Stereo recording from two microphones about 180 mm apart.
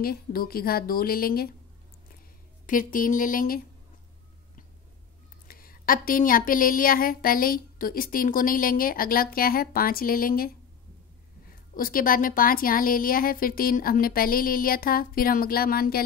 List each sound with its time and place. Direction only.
0.0 s a woman's voice: 55° left (ahead or behind)
2.6 s a woman's voice: 50° left (ahead or behind)
5.5 s a woman's voice: 55° left (ahead or behind)
11.7 s a woman's voice: 50° left (ahead or behind)